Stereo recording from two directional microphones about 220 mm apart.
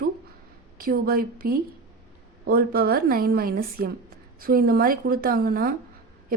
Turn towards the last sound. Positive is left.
turn(degrees=-40)  # may be behind; listen again after turning